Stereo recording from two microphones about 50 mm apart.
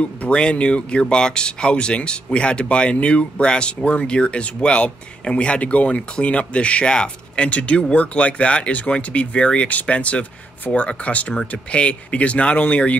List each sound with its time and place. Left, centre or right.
0.0 s speech: left